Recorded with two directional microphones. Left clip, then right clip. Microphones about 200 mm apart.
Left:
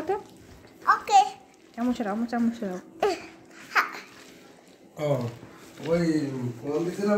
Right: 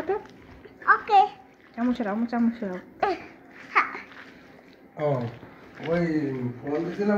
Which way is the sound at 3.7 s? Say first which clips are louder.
Right 1 dB; 75° left (ahead or behind).